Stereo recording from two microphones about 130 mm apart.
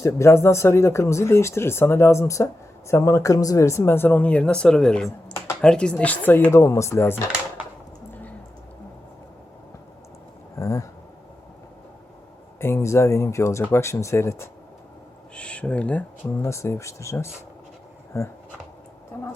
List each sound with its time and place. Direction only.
0.0 s speech: 20° left (ahead or behind)
10.6 s speech: 25° left (ahead or behind)
12.5 s speech: 20° left (ahead or behind)
15.4 s speech: 10° left (ahead or behind)
16.4 s speech: 20° left (ahead or behind)